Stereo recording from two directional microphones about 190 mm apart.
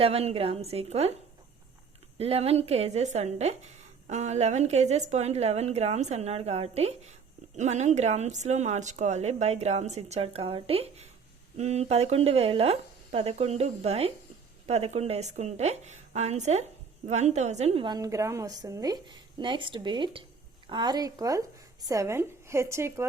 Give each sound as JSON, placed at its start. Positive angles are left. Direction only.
{"t": 0.0, "sound": "speech", "side_deg": -30}
{"t": 2.1, "sound": "a woman's voice", "side_deg": -30}